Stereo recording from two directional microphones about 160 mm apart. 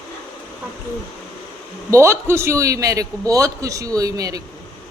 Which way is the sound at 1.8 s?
15° right (ahead or behind).